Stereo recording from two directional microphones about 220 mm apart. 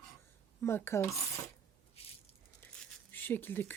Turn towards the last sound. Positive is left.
turn(degrees=10)  # may be behind; listen again after turning